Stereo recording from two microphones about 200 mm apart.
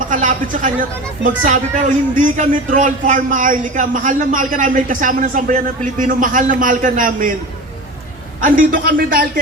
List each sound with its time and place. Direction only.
0.1 s a woman's voice: 40° right (ahead or behind)
8.4 s a man's voice: 45° right (ahead or behind)